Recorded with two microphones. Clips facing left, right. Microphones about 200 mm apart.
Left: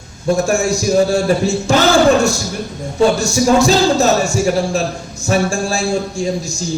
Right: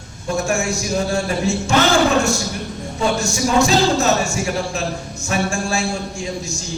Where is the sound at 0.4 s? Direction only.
35° left (ahead or behind).